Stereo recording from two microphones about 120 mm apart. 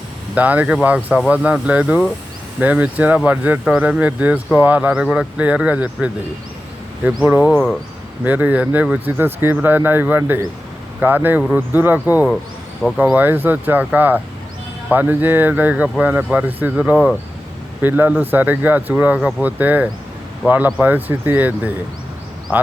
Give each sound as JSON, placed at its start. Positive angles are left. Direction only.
{"t": 0.3, "sound": "speech", "side_deg": -15}